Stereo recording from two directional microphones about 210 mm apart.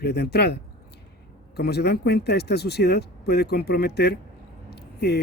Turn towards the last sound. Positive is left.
turn(degrees=50)  # may be behind; listen again after turning